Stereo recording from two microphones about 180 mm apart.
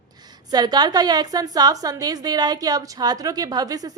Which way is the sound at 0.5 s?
20° right (ahead or behind).